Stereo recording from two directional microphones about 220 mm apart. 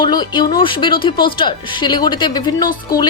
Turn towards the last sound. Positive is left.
turn(degrees=20)  # may be behind; listen again after turning